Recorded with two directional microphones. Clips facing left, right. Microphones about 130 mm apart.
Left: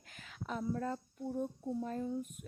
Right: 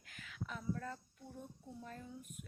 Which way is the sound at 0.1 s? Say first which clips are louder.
Left 6 dB; 35° left (ahead or behind).